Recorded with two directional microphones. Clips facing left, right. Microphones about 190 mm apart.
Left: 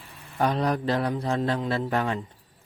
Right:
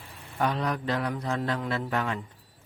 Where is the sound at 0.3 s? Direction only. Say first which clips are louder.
Left 4 dB; 35° left (ahead or behind).